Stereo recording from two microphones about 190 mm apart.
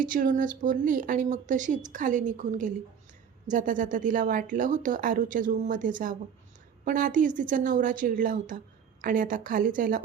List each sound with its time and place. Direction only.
0.0 s a woman's voice: 45° right (ahead or behind)